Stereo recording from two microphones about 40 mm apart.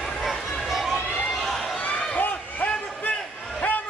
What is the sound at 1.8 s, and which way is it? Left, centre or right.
Run, left.